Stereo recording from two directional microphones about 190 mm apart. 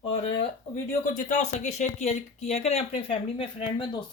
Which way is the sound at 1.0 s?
40° left (ahead or behind).